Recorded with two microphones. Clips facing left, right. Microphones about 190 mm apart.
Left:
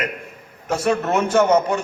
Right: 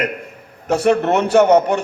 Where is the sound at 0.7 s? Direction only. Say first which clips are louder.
Right 4 dB; 35° right (ahead or behind).